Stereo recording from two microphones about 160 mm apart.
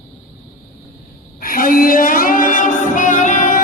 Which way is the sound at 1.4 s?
60° left (ahead or behind).